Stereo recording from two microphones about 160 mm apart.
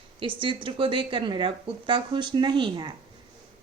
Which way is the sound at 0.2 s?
35° right (ahead or behind).